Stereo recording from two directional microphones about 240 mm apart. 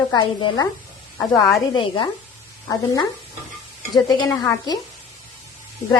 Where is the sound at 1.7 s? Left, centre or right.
Left.